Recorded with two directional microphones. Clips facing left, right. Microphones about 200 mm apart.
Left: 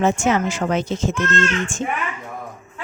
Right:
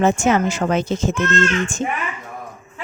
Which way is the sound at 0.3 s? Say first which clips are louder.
Right 2 dB; 45° right (ahead or behind).